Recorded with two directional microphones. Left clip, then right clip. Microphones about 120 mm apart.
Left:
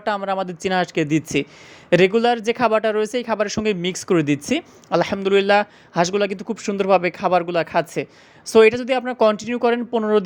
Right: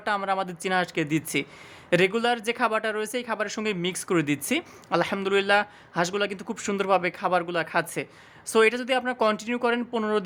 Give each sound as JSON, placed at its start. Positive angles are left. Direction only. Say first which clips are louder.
{"t": 0.0, "sound": "speech", "louder": "left 4 dB", "side_deg": 40}
{"t": 6.4, "sound": "speech", "louder": "left 5 dB", "side_deg": 25}